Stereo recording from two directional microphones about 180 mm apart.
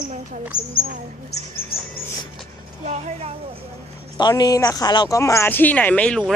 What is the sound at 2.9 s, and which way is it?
Speech, 40° right (ahead or behind).